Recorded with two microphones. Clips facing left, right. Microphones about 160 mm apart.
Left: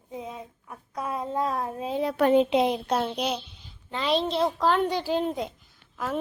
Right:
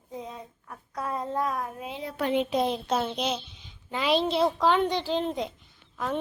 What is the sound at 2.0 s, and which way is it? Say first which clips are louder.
Speech: left 8 dB; 75° left (ahead or behind).